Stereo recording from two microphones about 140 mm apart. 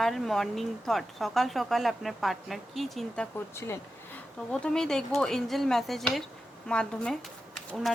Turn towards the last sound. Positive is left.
turn(degrees=0)  # may be behind; listen again after turning